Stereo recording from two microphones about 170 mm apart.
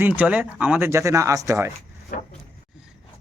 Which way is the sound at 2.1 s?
55° left (ahead or behind).